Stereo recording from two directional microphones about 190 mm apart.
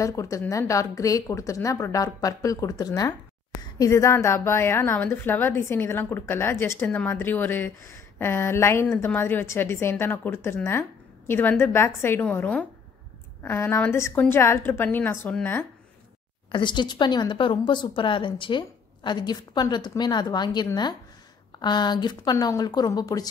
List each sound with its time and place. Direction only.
0.0 s a woman's voice: 15° left (ahead or behind)
16.5 s a woman's voice: 25° left (ahead or behind)